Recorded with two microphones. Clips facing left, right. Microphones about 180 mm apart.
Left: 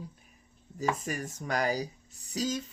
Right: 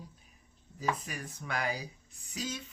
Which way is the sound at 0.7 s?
45° left (ahead or behind).